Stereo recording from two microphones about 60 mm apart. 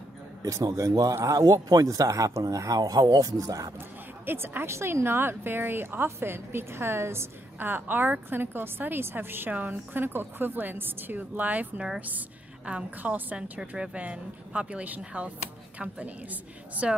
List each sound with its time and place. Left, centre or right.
0.5 s a man's voice: right
1.1 s speech: right
4.3 s a woman's voice: right
13.4 s speech: centre